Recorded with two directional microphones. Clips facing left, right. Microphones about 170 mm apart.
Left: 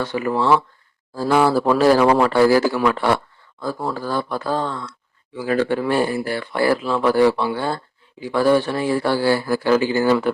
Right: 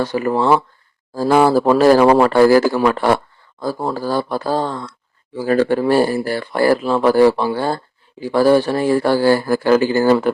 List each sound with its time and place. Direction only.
0.0 s speech: 40° right (ahead or behind)